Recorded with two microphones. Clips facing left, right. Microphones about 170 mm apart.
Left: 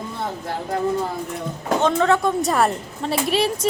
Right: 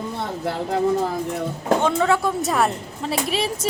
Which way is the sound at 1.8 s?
10° right (ahead or behind).